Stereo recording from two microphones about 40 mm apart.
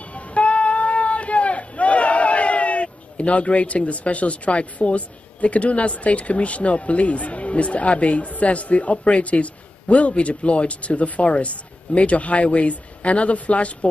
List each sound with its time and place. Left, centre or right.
0.0 s speech: left